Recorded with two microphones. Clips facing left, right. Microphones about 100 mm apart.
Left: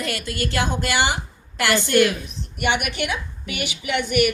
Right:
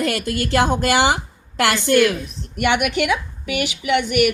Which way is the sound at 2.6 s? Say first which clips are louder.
Right 5 dB; 85° right.